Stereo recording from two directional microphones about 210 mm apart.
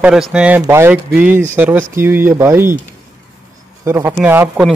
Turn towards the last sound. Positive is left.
turn(degrees=-10)  # may be behind; listen again after turning